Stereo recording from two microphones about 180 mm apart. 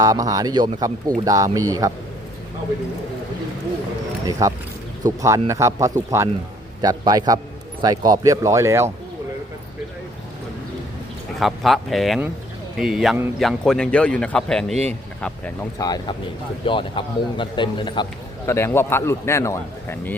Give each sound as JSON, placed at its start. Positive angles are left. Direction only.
{"t": 0.0, "sound": "speech", "side_deg": -20}
{"t": 4.3, "sound": "speech", "side_deg": -15}
{"t": 11.3, "sound": "speech", "side_deg": 0}
{"t": 14.7, "sound": "speech", "side_deg": -35}
{"t": 15.8, "sound": "a man's voice", "side_deg": 20}
{"t": 18.4, "sound": "speech", "side_deg": 15}